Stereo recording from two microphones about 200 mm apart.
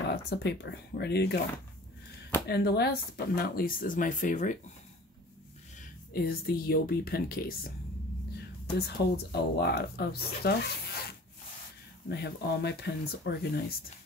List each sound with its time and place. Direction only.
0.1 s speech: 55° left (ahead or behind)
2.4 s speech: 55° left (ahead or behind)
6.1 s speech: 50° left (ahead or behind)
8.7 s speech: 55° left (ahead or behind)
12.1 s speech: 55° left (ahead or behind)